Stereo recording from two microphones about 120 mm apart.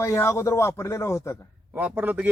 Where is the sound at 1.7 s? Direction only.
15° right (ahead or behind).